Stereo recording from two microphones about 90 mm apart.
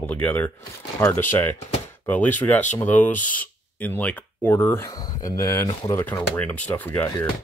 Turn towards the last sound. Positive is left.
turn(degrees=20)  # may be behind; listen again after turning